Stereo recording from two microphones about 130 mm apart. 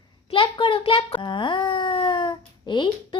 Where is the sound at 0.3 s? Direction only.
45° left (ahead or behind).